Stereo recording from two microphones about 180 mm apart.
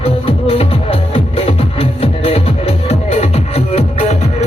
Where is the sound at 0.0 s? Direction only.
30° left (ahead or behind).